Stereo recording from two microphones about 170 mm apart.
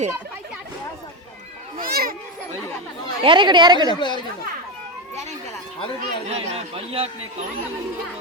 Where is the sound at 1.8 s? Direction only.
60° right (ahead or behind).